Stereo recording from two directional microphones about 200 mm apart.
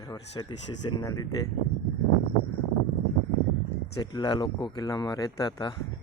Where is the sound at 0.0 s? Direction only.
20° left (ahead or behind).